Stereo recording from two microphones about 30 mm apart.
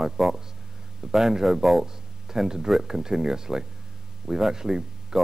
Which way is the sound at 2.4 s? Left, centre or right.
Centre.